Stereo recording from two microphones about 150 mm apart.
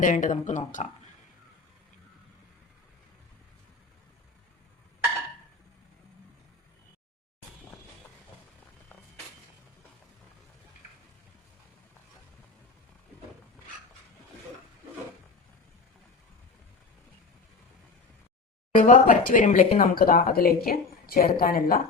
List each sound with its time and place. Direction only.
0.0 s speech: 55° left (ahead or behind)
18.7 s speech: 65° left (ahead or behind)
19.8 s speech: 75° left (ahead or behind)